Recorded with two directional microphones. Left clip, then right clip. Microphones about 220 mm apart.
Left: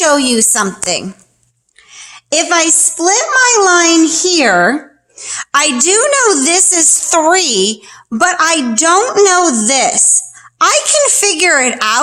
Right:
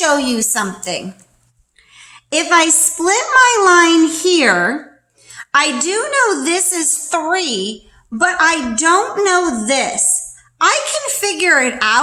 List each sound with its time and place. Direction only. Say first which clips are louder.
0.0 s a woman's voice: left 4 dB; 40° left (ahead or behind)